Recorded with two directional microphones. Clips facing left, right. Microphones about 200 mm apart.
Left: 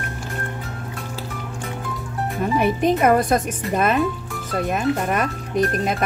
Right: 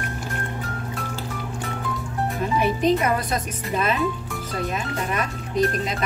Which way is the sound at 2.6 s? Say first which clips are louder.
Left 3 dB; 50° left (ahead or behind).